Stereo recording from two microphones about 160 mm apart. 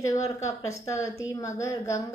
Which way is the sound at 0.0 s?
20° left (ahead or behind).